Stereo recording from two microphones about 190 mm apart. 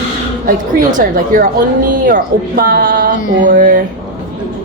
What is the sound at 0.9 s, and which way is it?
A woman's voice, 45° right (ahead or behind).